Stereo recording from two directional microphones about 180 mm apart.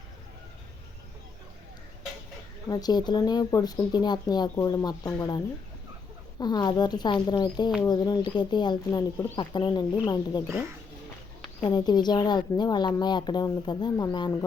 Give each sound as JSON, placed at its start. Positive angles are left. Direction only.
{"t": 2.6, "sound": "speech", "side_deg": 20}
{"t": 6.4, "sound": "speech", "side_deg": 20}
{"t": 11.6, "sound": "speech", "side_deg": 25}